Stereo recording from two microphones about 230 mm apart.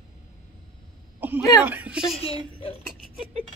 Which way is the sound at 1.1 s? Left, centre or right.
Centre.